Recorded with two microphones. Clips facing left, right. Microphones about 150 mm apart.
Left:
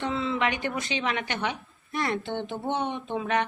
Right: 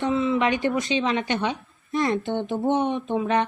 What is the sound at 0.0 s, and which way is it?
A woman's voice, 20° right (ahead or behind).